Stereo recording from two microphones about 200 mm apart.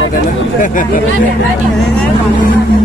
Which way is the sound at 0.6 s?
40° left (ahead or behind).